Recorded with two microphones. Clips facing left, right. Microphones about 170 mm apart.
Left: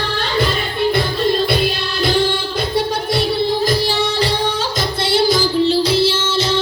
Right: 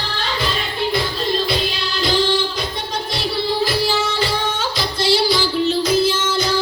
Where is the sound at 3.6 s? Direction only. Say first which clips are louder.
Left 2 dB; 40° left (ahead or behind).